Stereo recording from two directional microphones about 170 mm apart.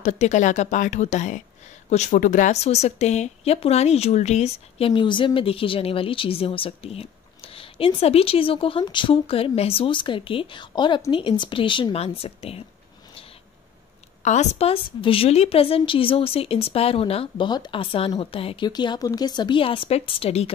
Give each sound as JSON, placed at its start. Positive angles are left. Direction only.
{"t": 0.0, "sound": "speech", "side_deg": 45}
{"t": 14.2, "sound": "speech", "side_deg": 45}